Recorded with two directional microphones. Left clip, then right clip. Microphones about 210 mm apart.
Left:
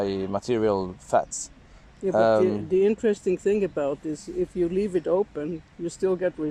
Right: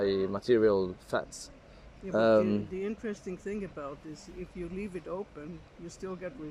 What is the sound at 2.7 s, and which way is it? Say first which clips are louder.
Speech: left 15 dB; 40° left (ahead or behind).